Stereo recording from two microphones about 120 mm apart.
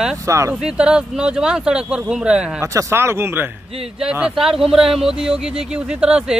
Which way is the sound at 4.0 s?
5° right (ahead or behind).